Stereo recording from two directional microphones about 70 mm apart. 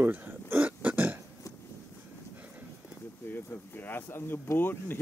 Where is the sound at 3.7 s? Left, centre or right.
Left.